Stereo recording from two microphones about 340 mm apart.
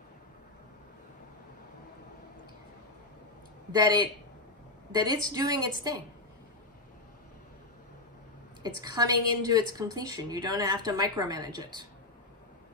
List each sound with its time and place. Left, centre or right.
3.7 s a woman's voice: centre
8.6 s a woman's voice: centre